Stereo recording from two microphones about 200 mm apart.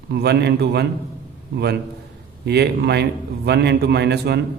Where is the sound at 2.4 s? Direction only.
55° right (ahead or behind).